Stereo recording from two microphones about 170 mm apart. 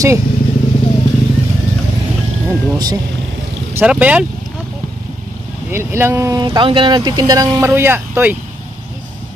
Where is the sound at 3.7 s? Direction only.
10° right (ahead or behind).